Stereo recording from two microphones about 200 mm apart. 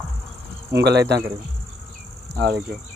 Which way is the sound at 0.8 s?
55° right (ahead or behind).